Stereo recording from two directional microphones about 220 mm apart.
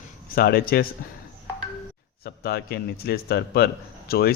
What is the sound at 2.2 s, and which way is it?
Speech, 45° left (ahead or behind).